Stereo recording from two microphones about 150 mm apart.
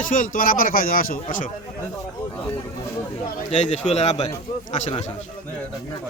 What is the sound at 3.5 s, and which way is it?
Speech, 50° left (ahead or behind).